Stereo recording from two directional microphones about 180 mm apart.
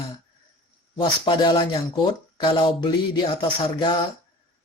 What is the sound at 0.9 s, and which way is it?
Speech, 25° left (ahead or behind).